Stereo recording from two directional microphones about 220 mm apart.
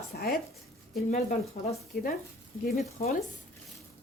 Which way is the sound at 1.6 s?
40° left (ahead or behind).